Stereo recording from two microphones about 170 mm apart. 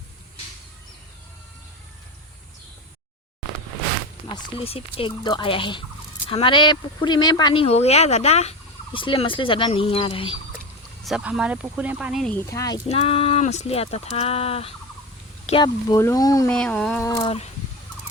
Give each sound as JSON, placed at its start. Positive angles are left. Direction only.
{"t": 4.3, "sound": "speech", "side_deg": 30}
{"t": 11.0, "sound": "speech", "side_deg": -5}
{"t": 12.3, "sound": "speech", "side_deg": 15}
{"t": 12.9, "sound": "speech", "side_deg": 35}
{"t": 15.6, "sound": "speech", "side_deg": 20}
{"t": 16.5, "sound": "a sound", "side_deg": 5}
{"t": 17.0, "sound": "speech", "side_deg": 25}